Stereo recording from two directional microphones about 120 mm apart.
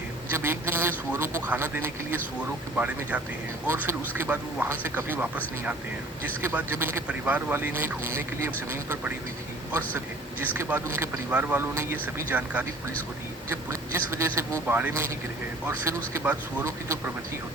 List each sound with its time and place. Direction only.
0.3 s a man's voice: 20° right (ahead or behind)
6.4 s speech: 15° right (ahead or behind)
10.4 s a man's voice: 15° right (ahead or behind)
16.1 s speech: 15° right (ahead or behind)